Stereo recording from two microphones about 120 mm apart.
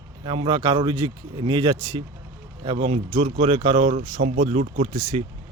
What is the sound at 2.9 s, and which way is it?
Speech, 60° right (ahead or behind).